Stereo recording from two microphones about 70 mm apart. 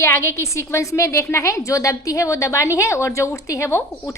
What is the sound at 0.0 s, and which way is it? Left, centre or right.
A woman's voice, left.